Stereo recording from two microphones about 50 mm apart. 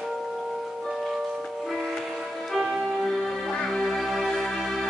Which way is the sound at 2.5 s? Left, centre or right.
Centre.